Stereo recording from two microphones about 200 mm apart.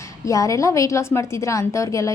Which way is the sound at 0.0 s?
15° left (ahead or behind).